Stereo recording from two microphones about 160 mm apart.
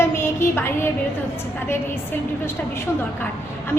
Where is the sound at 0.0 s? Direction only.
15° left (ahead or behind).